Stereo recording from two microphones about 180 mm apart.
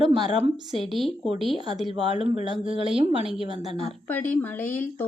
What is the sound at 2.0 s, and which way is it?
Speech, 30° right (ahead or behind).